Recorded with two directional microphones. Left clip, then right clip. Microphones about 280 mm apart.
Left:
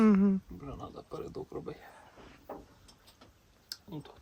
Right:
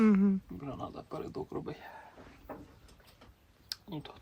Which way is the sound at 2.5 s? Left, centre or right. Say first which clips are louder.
Left 1 dB; left.